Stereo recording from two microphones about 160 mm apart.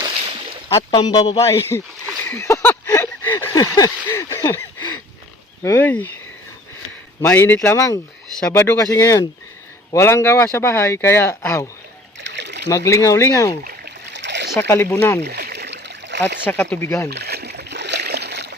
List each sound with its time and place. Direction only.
0.7 s a man's voice: 25° left (ahead or behind)
2.2 s a sound: 15° left (ahead or behind)
5.6 s speech: 10° left (ahead or behind)
7.2 s speech: 15° left (ahead or behind)
12.2 s a sound: 90° right
12.6 s a man's voice: 20° left (ahead or behind)
13.7 s splash: 85° right
14.7 s speech: 15° left (ahead or behind)
15.2 s a sound: 80° right
16.5 s speech: 10° left (ahead or behind)
17.1 s rowboat: 90° right